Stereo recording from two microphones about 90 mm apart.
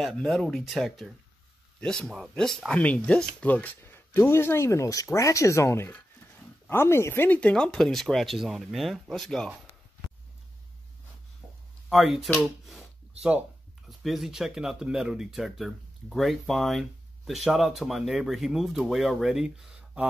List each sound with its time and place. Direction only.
0.0 s speech: centre (ahead or behind)
2.8 s speech: 15° left (ahead or behind)
11.9 s speech: centre (ahead or behind)
12.6 s a sound: centre (ahead or behind)
13.8 s speech: centre (ahead or behind)